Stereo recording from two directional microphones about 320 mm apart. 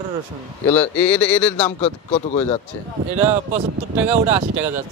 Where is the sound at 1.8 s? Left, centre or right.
Left.